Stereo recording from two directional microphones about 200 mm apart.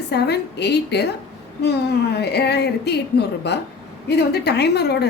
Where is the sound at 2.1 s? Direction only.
55° left (ahead or behind).